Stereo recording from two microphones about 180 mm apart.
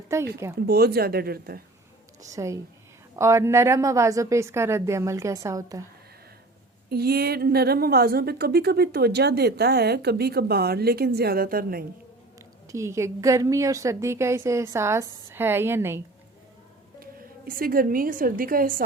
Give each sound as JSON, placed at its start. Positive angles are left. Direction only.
{"t": 0.7, "sound": "a woman's voice", "side_deg": -60}
{"t": 2.2, "sound": "a woman's voice", "side_deg": -15}
{"t": 6.9, "sound": "a woman's voice", "side_deg": -60}
{"t": 12.6, "sound": "a woman's voice", "side_deg": -15}
{"t": 17.0, "sound": "a woman's voice", "side_deg": -55}